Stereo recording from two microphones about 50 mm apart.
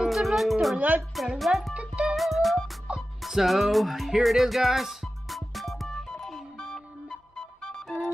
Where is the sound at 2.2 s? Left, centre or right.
Centre.